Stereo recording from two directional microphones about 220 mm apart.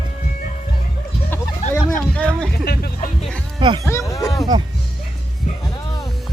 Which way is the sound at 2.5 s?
45° left (ahead or behind).